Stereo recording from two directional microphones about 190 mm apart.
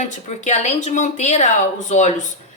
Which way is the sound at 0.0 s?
40° left (ahead or behind).